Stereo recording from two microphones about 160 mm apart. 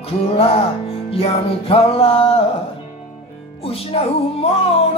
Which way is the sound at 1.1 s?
40° left (ahead or behind).